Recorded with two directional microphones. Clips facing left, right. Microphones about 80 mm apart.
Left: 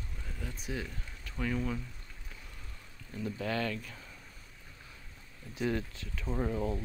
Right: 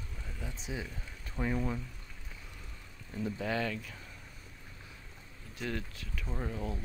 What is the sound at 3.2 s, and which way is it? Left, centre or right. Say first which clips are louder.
Speech: even; centre.